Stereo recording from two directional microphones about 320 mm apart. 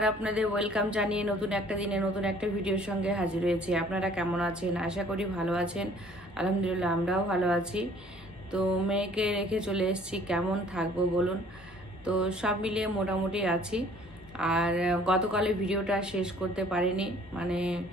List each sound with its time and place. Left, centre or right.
0.0 s a woman's voice: centre